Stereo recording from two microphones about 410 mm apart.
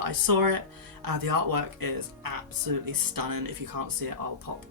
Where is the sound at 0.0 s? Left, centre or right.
Right.